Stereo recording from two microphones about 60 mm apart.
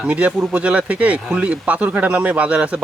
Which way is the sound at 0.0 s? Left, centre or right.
Centre.